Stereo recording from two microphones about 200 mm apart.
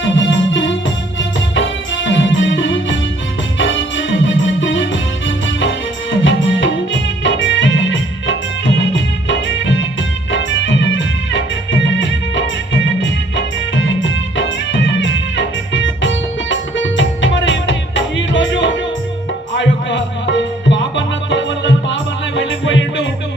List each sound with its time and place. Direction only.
0.0 s music: 65° left (ahead or behind)
2.0 s music: 65° left (ahead or behind)